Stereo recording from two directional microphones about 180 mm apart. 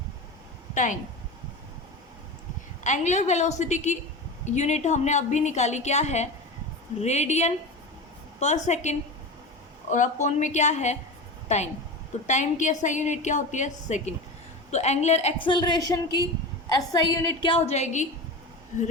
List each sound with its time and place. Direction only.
0.7 s speech: 45° left (ahead or behind)
2.8 s a woman's voice: 40° left (ahead or behind)